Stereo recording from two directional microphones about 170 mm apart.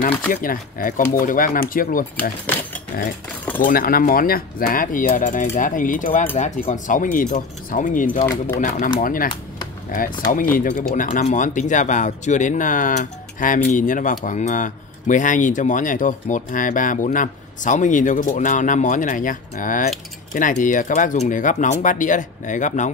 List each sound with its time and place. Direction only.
0.3 s speech: 55° left (ahead or behind)
3.6 s speech: 60° left (ahead or behind)